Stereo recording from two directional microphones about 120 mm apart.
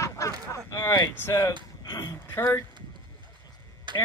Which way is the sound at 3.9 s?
40° right (ahead or behind).